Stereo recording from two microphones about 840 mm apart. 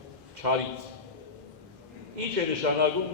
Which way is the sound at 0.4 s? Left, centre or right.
Right.